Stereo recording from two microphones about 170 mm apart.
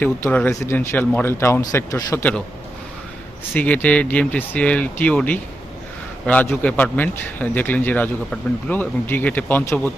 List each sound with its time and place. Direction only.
0.0 s a man's voice: 10° left (ahead or behind)
3.5 s a man's voice: 10° left (ahead or behind)